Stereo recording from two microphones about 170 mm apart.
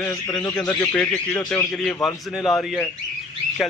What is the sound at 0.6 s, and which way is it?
A man's voice, 10° left (ahead or behind).